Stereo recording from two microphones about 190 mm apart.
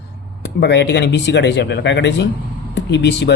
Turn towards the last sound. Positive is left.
turn(degrees=65)  # may be behind; listen again after turning